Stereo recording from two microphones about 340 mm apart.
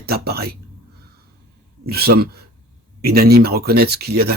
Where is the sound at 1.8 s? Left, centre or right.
Right.